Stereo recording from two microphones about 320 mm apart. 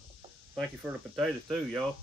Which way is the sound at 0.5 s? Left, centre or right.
Centre.